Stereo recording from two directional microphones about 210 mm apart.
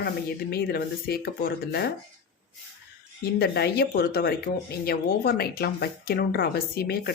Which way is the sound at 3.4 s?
50° left (ahead or behind).